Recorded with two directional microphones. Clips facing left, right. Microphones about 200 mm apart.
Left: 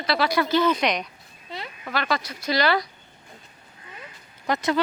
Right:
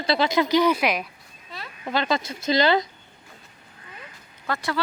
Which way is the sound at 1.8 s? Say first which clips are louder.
Right 3 dB; 25° right (ahead or behind).